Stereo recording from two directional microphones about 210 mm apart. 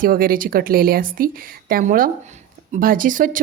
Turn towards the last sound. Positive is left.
turn(degrees=-40)  # may be behind; listen again after turning